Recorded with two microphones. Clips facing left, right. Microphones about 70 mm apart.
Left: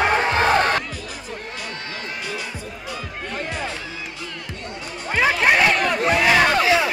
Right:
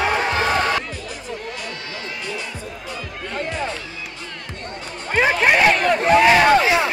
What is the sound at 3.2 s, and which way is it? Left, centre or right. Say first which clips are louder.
Music: right 3 dB; right.